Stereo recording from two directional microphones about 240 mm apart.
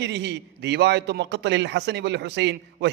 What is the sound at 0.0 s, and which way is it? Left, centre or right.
Speech, right.